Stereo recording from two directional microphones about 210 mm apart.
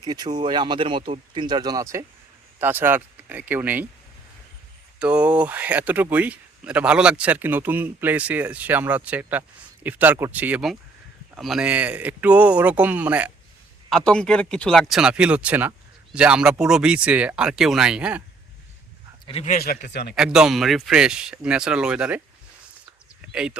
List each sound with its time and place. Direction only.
0.0 s speech: 20° right (ahead or behind)
4.9 s speech: 5° right (ahead or behind)
13.9 s speech: 5° left (ahead or behind)
19.2 s a man's voice: 30° left (ahead or behind)
19.5 s a man's voice: 40° left (ahead or behind)
20.1 s speech: 5° right (ahead or behind)
23.3 s speech: 5° right (ahead or behind)